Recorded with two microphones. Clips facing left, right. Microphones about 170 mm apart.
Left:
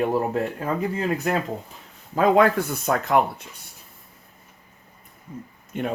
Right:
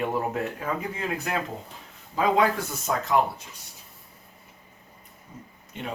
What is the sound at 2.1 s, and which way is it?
Speech, 55° left (ahead or behind).